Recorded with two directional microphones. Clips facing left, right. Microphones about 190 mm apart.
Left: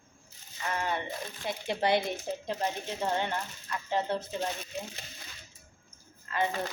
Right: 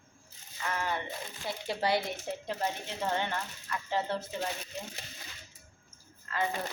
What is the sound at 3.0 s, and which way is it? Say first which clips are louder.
Speech: left 1 dB; 15° left (ahead or behind).